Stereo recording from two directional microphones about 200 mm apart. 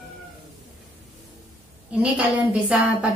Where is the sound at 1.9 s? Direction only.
5° right (ahead or behind).